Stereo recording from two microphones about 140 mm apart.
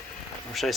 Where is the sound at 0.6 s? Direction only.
Centre (ahead or behind).